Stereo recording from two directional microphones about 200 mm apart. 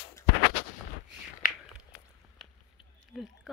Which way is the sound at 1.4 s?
45° left (ahead or behind).